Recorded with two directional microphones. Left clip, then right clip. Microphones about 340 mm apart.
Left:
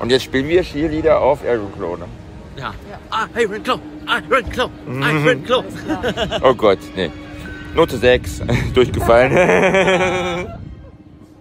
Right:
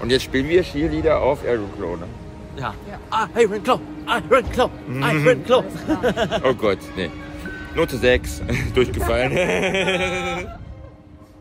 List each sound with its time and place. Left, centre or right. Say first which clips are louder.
0.0 s speech: left 3 dB; centre
2.6 s a man's voice: left 1 dB; centre
6.4 s speech: left 11 dB; centre